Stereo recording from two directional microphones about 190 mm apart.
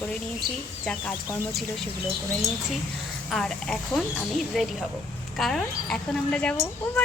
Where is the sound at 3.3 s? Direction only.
5° left (ahead or behind).